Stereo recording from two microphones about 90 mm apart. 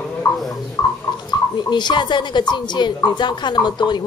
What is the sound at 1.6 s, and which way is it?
A woman's voice, 55° left (ahead or behind).